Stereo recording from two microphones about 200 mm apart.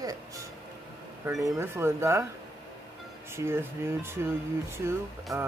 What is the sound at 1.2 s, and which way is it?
Speech, 15° right (ahead or behind).